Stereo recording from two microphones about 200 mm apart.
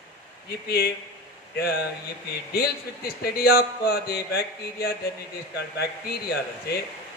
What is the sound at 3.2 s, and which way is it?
Speech, 50° left (ahead or behind).